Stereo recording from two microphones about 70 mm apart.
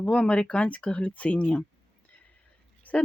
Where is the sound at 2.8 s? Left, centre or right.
Left.